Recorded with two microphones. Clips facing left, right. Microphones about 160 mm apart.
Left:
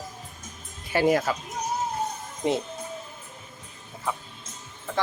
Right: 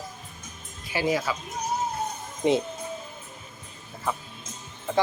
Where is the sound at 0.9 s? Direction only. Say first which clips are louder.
Left 4 dB; 55° left (ahead or behind).